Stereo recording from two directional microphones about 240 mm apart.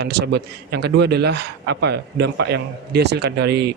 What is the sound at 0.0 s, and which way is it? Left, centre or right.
A man's voice, right.